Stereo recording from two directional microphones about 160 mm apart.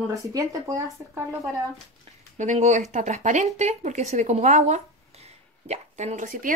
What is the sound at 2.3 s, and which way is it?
Speech, 50° right (ahead or behind).